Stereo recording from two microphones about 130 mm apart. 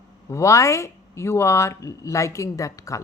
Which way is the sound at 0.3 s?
25° left (ahead or behind).